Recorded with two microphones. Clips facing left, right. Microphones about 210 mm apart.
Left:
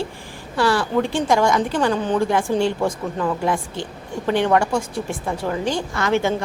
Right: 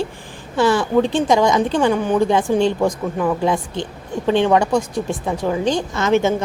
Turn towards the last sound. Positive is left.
turn(degrees=-20)  # may be behind; listen again after turning